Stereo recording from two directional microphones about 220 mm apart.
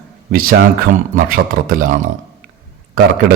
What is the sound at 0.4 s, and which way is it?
A man's voice, 40° right (ahead or behind).